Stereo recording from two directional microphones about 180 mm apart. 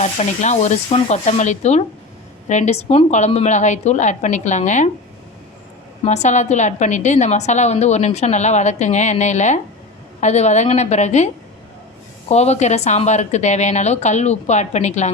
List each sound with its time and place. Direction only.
0.0 s a woman's voice: 40° left (ahead or behind)
6.1 s a woman's voice: 40° left (ahead or behind)
12.3 s a woman's voice: 40° left (ahead or behind)